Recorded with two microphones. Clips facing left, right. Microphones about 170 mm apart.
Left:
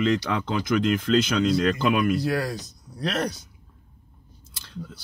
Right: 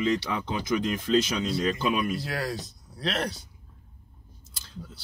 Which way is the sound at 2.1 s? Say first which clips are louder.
Left 6 dB; 45° left (ahead or behind).